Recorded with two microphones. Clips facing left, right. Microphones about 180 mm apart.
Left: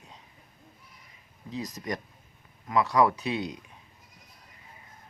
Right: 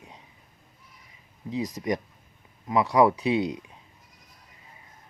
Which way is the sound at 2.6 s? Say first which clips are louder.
Right 3 dB; 20° right (ahead or behind).